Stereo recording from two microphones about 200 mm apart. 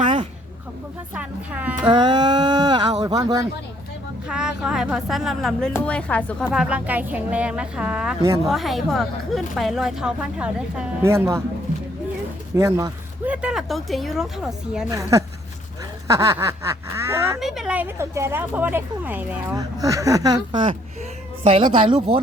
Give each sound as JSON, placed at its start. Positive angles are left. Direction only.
{"t": 0.0, "sound": "a sound", "side_deg": -25}
{"t": 1.1, "sound": "speech", "side_deg": -5}
{"t": 1.9, "sound": "speech", "side_deg": -20}
{"t": 4.3, "sound": "speech", "side_deg": -5}
{"t": 12.5, "sound": "speech", "side_deg": -15}
{"t": 14.8, "sound": "speech", "side_deg": -15}
{"t": 17.4, "sound": "speech", "side_deg": 0}